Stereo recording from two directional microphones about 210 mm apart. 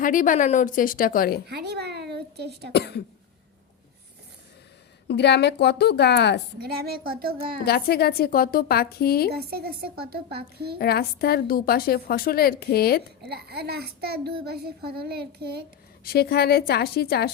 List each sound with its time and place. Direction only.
0.0 s a woman's voice: 40° left (ahead or behind)
1.5 s a sound: 50° right (ahead or behind)
2.7 s a woman's voice: 50° left (ahead or behind)
5.0 s a woman's voice: 55° left (ahead or behind)
6.6 s a child's voice: 45° right (ahead or behind)
7.6 s a woman's voice: 50° left (ahead or behind)
9.5 s a child's voice: 50° right (ahead or behind)
10.8 s a woman's voice: 50° left (ahead or behind)
13.2 s a child's voice: 50° right (ahead or behind)
16.0 s a woman's voice: 50° left (ahead or behind)